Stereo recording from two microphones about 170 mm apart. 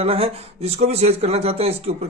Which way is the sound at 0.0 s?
35° right (ahead or behind).